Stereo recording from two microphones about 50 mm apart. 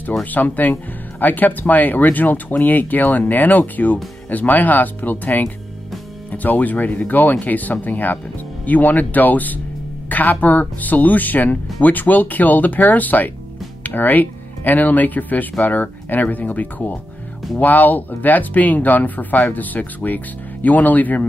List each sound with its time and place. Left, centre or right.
0.2 s speech: left